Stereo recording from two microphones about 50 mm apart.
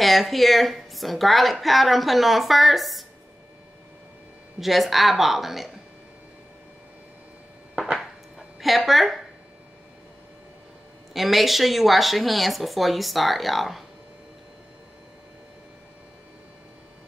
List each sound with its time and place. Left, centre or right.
0.0 s a woman's voice: centre
4.6 s a woman's voice: centre
7.9 s a sound: centre
11.1 s a woman's voice: centre